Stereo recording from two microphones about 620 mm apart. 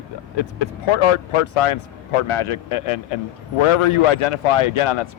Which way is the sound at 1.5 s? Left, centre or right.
Left.